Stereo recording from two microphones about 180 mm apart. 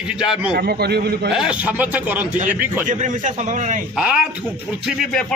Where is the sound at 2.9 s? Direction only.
45° right (ahead or behind).